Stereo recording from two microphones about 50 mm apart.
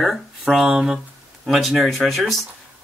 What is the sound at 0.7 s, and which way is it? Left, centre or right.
Speech, centre.